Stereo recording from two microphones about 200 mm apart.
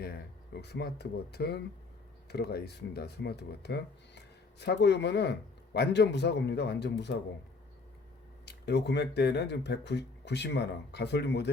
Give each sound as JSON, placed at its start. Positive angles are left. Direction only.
{"t": 0.0, "sound": "speech", "side_deg": 55}
{"t": 8.4, "sound": "speech", "side_deg": 55}